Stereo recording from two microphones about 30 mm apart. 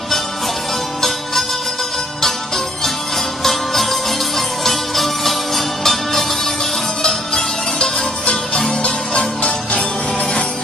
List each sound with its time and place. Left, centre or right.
2.2 s music: centre
7.0 s music: left
9.4 s music: left